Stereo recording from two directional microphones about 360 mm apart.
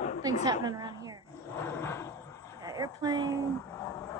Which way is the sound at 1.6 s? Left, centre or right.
Centre.